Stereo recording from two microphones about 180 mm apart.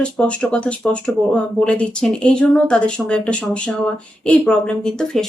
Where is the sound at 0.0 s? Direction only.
5° left (ahead or behind).